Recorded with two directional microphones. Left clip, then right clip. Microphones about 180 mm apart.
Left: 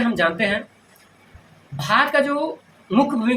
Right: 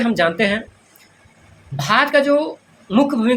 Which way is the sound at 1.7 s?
60° right (ahead or behind).